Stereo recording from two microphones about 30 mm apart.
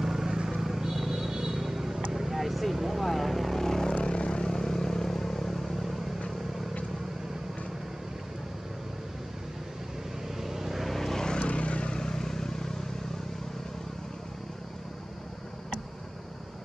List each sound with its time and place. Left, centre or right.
0.0 s vehicle: centre
3.9 s vehicle: left
4.5 s vehicle: centre
10.4 s vehicle: centre
10.9 s vehicle: centre
11.3 s vehicle: left
12.0 s vehicle: centre